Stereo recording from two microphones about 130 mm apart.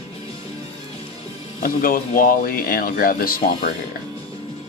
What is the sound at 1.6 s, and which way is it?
Speech, 90° left.